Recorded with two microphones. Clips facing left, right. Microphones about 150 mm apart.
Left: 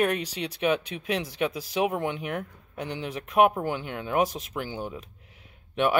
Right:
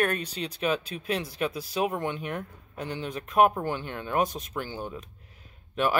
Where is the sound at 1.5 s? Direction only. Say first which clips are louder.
Left 1 dB; 90° left.